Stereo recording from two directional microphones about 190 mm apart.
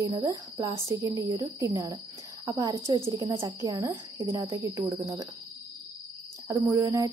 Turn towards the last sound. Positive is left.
turn(degrees=-20)  # may be behind; listen again after turning